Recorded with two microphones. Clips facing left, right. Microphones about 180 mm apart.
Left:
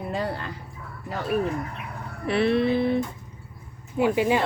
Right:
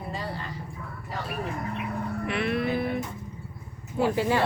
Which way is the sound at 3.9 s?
15° left (ahead or behind).